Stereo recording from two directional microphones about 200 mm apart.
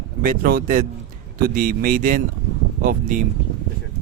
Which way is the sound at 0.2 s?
45° right (ahead or behind).